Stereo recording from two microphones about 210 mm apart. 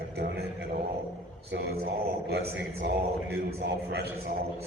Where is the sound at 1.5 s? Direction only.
50° right (ahead or behind).